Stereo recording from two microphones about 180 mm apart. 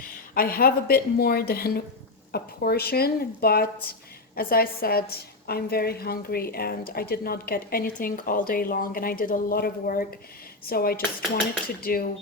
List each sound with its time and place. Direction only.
0.3 s a woman's voice: 55° left (ahead or behind)